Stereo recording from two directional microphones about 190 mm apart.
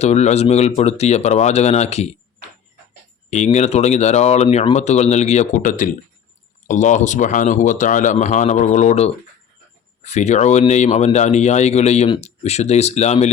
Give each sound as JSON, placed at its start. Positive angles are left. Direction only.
{"t": 0.0, "sound": "speech", "side_deg": 35}
{"t": 3.2, "sound": "speech", "side_deg": 35}